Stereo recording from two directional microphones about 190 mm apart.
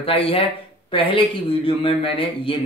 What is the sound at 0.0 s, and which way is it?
A man's voice, 30° left (ahead or behind).